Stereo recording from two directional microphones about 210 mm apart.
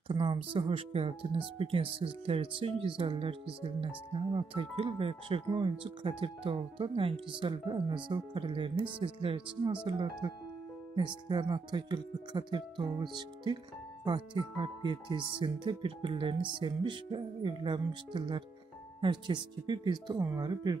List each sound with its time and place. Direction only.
0.1 s speech: 25° right (ahead or behind)